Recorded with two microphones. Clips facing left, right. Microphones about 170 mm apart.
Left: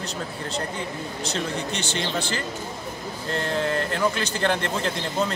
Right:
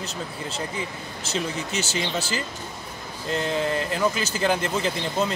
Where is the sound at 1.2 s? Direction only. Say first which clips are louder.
Even; 5° right (ahead or behind).